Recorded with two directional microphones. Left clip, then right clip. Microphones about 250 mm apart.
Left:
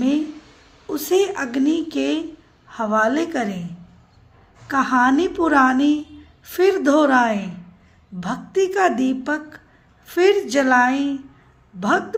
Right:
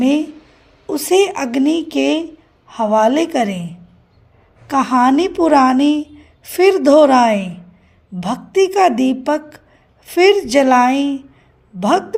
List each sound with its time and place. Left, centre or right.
0.0 s a sound: right
0.9 s a woman's voice: right
4.7 s a woman's voice: right